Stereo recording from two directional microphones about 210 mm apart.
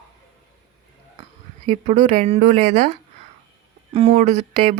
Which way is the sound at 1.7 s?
35° right (ahead or behind).